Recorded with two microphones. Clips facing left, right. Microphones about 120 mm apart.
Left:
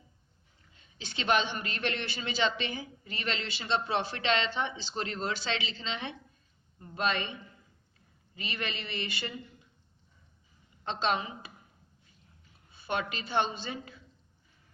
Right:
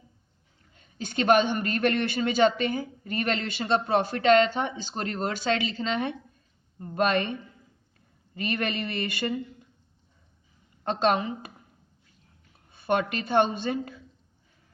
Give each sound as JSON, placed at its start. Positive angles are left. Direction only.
{"t": 0.7, "sound": "a man's voice", "side_deg": -50}
{"t": 8.4, "sound": "a man's voice", "side_deg": -50}
{"t": 10.8, "sound": "a man's voice", "side_deg": -50}
{"t": 12.7, "sound": "a man's voice", "side_deg": -55}